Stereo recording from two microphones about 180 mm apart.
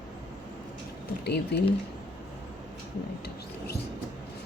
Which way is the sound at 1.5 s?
65° left (ahead or behind).